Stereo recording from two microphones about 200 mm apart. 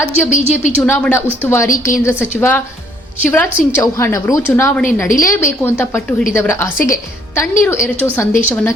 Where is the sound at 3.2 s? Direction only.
10° left (ahead or behind).